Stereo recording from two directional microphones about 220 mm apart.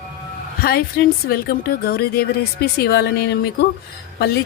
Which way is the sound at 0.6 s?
45° left (ahead or behind).